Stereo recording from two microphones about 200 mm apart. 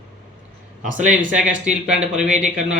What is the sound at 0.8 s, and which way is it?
Speech, 40° right (ahead or behind).